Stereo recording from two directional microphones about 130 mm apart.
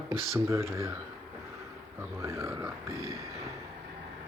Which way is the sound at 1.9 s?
20° right (ahead or behind).